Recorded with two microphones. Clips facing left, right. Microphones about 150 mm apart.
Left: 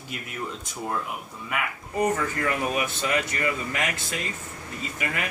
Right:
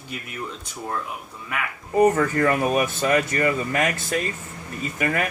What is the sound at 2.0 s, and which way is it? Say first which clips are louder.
Speech: right 7 dB; 50° right (ahead or behind).